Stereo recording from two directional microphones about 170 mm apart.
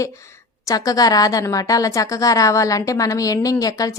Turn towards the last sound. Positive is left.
turn(degrees=20)  # may be behind; listen again after turning